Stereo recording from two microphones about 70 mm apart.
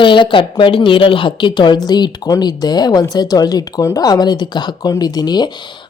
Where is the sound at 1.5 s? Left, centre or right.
Left.